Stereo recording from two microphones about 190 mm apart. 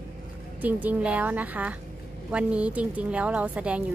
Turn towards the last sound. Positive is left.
turn(degrees=-5)  # may be behind; listen again after turning